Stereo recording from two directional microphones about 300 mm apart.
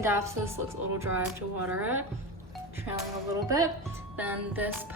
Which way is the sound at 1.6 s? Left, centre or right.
Centre.